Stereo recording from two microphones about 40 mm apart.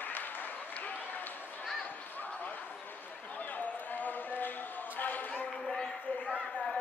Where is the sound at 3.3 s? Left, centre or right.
Left.